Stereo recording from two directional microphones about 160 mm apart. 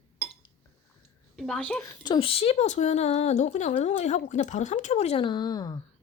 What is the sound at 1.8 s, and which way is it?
Speech, 30° left (ahead or behind).